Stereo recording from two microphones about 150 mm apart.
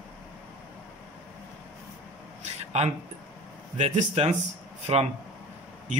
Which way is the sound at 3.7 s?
50° right (ahead or behind).